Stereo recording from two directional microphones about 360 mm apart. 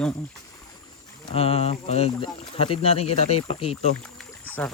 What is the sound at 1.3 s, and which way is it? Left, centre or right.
Speech, centre.